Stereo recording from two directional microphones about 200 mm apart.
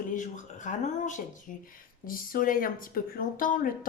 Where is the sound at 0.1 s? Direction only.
40° left (ahead or behind).